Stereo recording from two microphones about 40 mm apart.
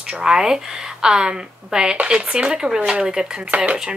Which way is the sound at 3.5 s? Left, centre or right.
Right.